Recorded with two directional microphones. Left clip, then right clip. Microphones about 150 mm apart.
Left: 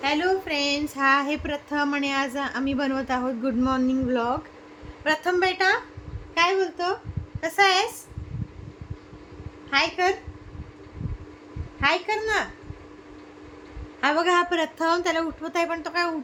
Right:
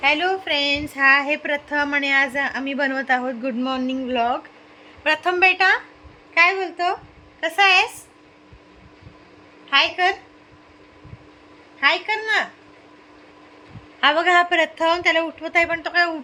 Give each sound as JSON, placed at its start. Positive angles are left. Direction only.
{"t": 0.0, "sound": "speech", "side_deg": -30}
{"t": 3.6, "sound": "a woman's voice", "side_deg": -5}
{"t": 11.9, "sound": "a woman's voice", "side_deg": -10}
{"t": 14.0, "sound": "speech", "side_deg": -20}